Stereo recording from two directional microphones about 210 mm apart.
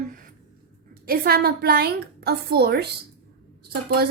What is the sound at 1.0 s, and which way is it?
A woman's voice, 45° right (ahead or behind).